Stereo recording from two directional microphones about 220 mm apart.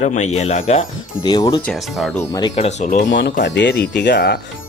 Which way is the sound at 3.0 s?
55° left (ahead or behind).